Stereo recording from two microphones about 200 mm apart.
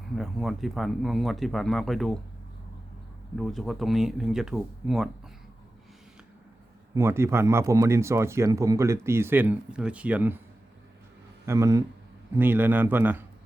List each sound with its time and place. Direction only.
0.1 s speech: centre (ahead or behind)
3.3 s speech: centre (ahead or behind)
6.9 s speech: 15° right (ahead or behind)
11.4 s speech: 15° right (ahead or behind)